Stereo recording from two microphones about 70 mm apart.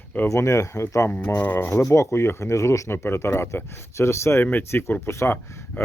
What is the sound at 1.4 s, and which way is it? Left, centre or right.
Speech, left.